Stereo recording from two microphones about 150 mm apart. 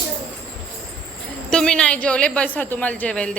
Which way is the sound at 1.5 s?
5° left (ahead or behind).